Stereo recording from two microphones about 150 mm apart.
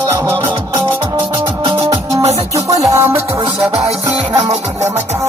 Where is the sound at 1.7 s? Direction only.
20° right (ahead or behind).